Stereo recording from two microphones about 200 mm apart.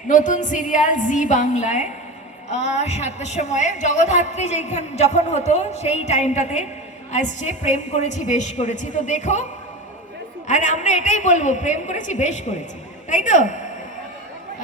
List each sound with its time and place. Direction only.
0.1 s a woman's voice: 40° left (ahead or behind)